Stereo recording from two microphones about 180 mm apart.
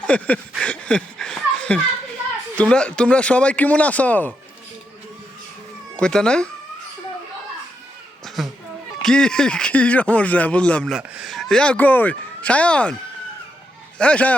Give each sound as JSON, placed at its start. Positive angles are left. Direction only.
{"t": 0.0, "sound": "a sound", "side_deg": 10}
{"t": 2.6, "sound": "speech", "side_deg": 5}
{"t": 6.0, "sound": "speech", "side_deg": 5}
{"t": 8.4, "sound": "speech", "side_deg": 0}
{"t": 14.0, "sound": "speech", "side_deg": 5}